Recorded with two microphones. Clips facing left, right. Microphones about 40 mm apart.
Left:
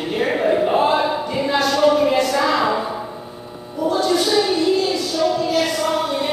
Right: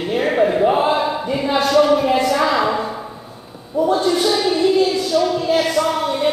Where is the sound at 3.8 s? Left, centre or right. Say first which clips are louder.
Right 4 dB; right.